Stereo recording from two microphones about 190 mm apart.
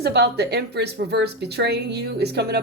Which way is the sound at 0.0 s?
60° right (ahead or behind).